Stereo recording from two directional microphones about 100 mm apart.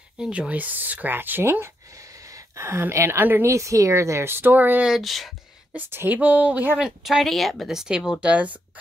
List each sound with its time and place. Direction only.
0.2 s speech: 15° right (ahead or behind)
4.9 s a sound: centre (ahead or behind)
5.8 s a woman's voice: 20° right (ahead or behind)
6.8 s speech: 5° right (ahead or behind)